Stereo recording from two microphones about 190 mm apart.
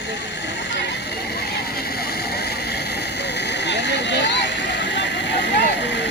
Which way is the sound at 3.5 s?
65° left (ahead or behind).